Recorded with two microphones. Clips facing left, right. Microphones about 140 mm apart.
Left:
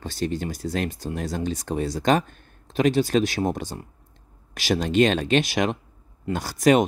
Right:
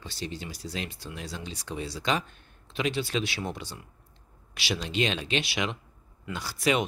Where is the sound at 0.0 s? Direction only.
50° left (ahead or behind).